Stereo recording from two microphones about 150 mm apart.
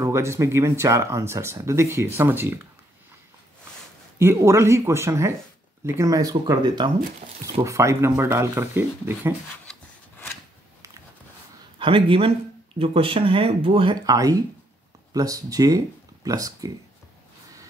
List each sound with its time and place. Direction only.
0.0 s speech: 20° right (ahead or behind)
4.2 s speech: 20° right (ahead or behind)
9.7 s a sound: 15° left (ahead or behind)
11.8 s speech: 35° right (ahead or behind)